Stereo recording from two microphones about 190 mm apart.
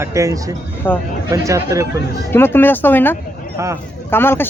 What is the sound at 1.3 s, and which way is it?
Speech, 15° right (ahead or behind).